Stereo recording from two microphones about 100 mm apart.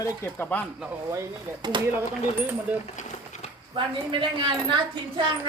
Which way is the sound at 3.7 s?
55° right (ahead or behind).